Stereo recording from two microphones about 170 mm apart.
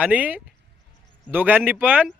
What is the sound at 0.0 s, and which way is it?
A man's voice, 10° right (ahead or behind).